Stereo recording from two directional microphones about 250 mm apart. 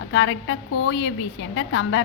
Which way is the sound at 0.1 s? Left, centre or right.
Left.